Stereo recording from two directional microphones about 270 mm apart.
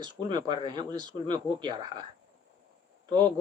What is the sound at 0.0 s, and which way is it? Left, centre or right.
Speech, centre.